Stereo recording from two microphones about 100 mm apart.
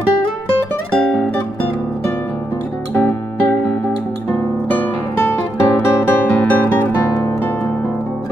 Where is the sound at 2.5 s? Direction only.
20° left (ahead or behind).